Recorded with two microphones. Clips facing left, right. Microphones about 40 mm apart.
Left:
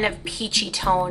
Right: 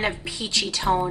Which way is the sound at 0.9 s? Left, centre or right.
Centre.